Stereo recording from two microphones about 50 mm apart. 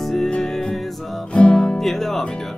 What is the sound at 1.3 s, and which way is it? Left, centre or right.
Music, centre.